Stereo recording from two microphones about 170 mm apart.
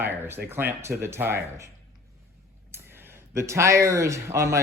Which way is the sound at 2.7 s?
15° right (ahead or behind).